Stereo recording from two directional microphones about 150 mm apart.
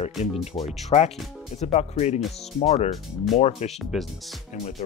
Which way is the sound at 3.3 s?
45° left (ahead or behind).